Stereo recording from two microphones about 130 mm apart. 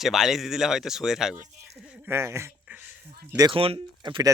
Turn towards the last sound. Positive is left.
turn(degrees=-30)  # may be behind; listen again after turning